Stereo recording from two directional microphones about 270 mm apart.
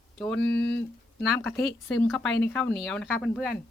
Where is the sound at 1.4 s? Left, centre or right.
Centre.